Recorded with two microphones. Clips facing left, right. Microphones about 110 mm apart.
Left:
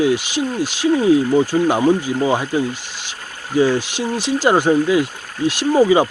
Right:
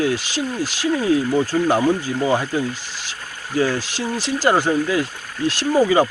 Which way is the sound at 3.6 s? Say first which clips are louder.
Left 4 dB; 20° left (ahead or behind).